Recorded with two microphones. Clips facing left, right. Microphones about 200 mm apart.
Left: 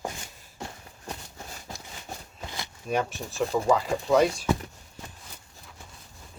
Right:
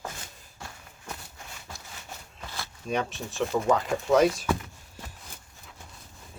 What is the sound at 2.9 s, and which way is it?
Speech, centre (ahead or behind).